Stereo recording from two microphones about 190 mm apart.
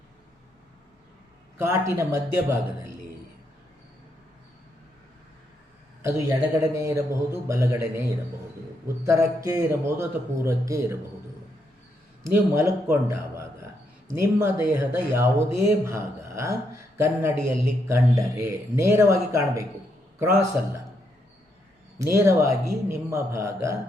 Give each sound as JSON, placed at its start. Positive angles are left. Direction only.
{"t": 1.5, "sound": "speech", "side_deg": -15}
{"t": 6.0, "sound": "speech", "side_deg": -15}
{"t": 9.0, "sound": "speech", "side_deg": -15}
{"t": 12.3, "sound": "speech", "side_deg": -10}
{"t": 22.1, "sound": "speech", "side_deg": -15}